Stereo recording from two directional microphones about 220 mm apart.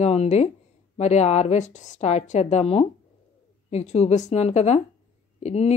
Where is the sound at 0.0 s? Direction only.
30° left (ahead or behind).